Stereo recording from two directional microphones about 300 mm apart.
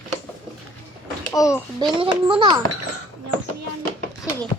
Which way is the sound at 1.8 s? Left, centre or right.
Centre.